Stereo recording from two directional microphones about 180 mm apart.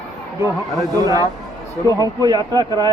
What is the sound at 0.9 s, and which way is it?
Speech, 20° right (ahead or behind).